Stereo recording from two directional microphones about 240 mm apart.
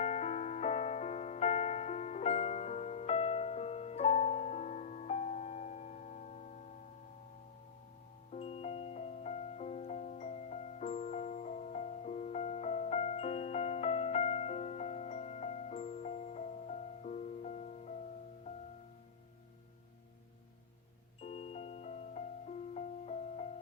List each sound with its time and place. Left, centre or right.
0.0 s music: left
8.3 s music: left
21.2 s music: left